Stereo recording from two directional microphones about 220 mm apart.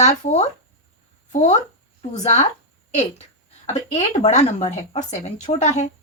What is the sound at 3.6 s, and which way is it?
A woman's voice, 30° left (ahead or behind).